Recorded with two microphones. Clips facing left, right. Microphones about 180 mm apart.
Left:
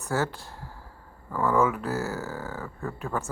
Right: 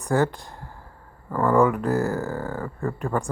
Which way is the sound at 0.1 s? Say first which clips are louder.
Right 6 dB; 5° left (ahead or behind).